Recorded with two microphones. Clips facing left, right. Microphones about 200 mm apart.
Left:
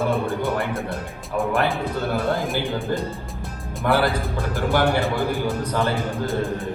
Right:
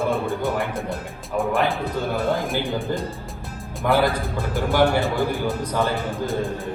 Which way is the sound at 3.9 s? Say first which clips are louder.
Right 1 dB; 15° right (ahead or behind).